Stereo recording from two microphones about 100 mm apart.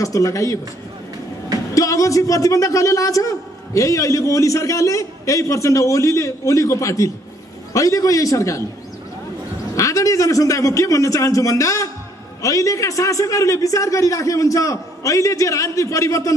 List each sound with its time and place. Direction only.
0.0 s a man's voice: 35° left (ahead or behind)
1.7 s a man's voice: 35° left (ahead or behind)
9.8 s a man's voice: 35° left (ahead or behind)